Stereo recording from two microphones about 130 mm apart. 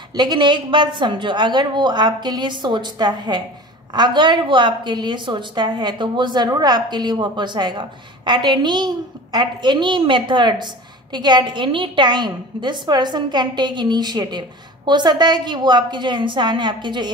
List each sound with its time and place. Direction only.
0.1 s a woman's voice: 35° right (ahead or behind)